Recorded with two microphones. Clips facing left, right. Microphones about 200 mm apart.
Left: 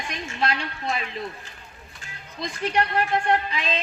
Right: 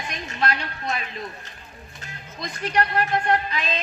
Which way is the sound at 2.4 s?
25° left (ahead or behind).